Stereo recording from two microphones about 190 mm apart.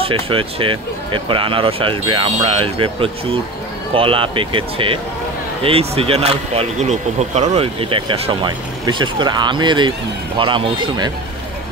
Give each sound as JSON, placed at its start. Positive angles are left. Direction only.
{"t": 0.0, "sound": "speech", "side_deg": -30}